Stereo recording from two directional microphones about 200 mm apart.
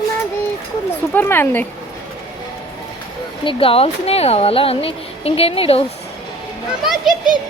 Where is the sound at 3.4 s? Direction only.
30° left (ahead or behind).